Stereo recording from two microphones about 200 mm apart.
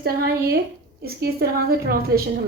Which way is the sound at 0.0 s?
50° right (ahead or behind).